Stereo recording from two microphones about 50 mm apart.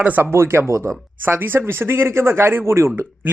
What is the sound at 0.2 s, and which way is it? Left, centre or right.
Speech, right.